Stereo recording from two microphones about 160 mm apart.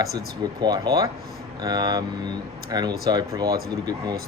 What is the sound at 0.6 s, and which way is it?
Speech, 25° right (ahead or behind).